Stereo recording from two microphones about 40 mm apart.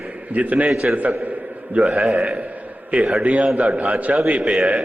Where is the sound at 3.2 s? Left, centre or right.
Right.